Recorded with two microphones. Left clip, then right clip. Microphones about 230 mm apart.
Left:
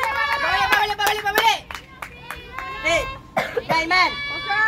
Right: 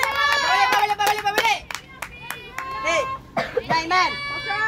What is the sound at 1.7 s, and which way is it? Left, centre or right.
Music, right.